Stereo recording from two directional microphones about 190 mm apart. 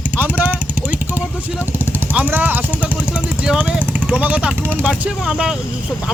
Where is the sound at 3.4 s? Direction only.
5° right (ahead or behind).